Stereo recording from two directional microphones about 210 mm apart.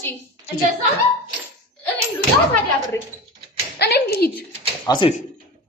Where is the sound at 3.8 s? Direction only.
50° left (ahead or behind).